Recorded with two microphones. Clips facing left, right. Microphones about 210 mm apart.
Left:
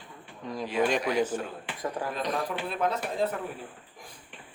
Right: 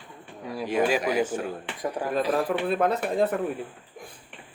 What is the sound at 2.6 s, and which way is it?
Speech, 55° right (ahead or behind).